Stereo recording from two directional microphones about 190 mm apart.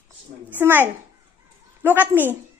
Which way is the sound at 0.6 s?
10° right (ahead or behind).